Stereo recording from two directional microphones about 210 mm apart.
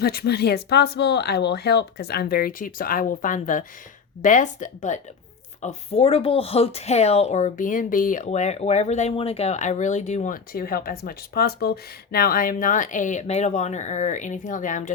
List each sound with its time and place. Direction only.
0.0 s speech: 50° left (ahead or behind)